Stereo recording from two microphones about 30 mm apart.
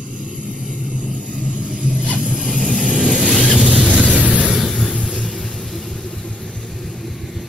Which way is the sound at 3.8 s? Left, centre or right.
Right.